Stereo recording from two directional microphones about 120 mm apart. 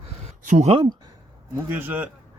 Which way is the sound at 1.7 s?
15° right (ahead or behind).